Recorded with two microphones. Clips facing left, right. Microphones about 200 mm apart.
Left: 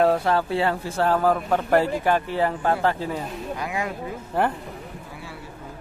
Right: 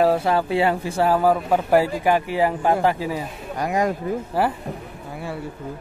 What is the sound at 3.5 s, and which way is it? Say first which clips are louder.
Speech: right 9 dB; 45° right (ahead or behind).